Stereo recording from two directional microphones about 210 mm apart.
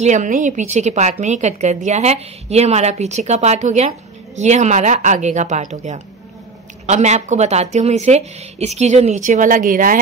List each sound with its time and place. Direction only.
0.0 s a woman's voice: 35° right (ahead or behind)